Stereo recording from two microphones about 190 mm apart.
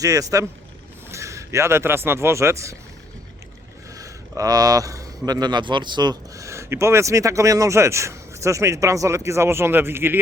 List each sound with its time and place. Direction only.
0.0 s speech: 15° right (ahead or behind)
3.9 s speech: 20° right (ahead or behind)